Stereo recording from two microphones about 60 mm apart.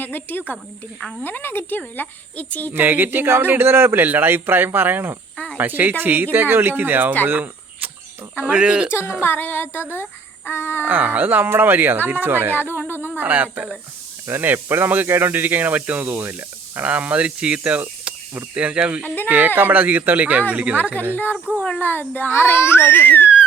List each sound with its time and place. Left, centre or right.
0.0 s a child's voice: left
2.7 s speech: right
7.3 s a sound: right
8.4 s speech: right
8.9 s a woman's voice: left
10.8 s speech: right
12.5 s a child's voice: left
13.1 s speech: right
16.8 s speech: right
19.0 s a child's voice: left
19.5 s speech: right
21.8 s a child's voice: left